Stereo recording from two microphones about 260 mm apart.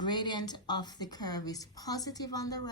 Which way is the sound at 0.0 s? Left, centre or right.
Centre.